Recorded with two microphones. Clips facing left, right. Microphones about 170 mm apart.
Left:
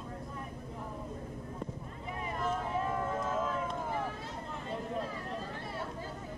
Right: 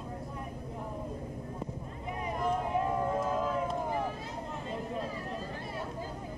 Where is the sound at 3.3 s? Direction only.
Centre (ahead or behind).